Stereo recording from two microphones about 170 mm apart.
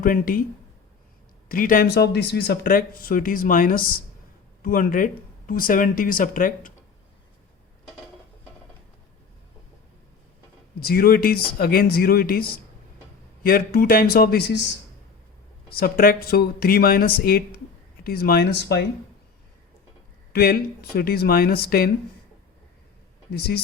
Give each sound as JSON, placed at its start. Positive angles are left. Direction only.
{"t": 0.0, "sound": "speech", "side_deg": 55}
{"t": 1.5, "sound": "speech", "side_deg": 55}
{"t": 10.8, "sound": "speech", "side_deg": 65}
{"t": 15.7, "sound": "speech", "side_deg": 60}
{"t": 20.3, "sound": "speech", "side_deg": 65}
{"t": 23.3, "sound": "speech", "side_deg": 70}